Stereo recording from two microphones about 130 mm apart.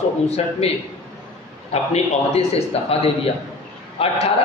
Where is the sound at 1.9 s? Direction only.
50° left (ahead or behind).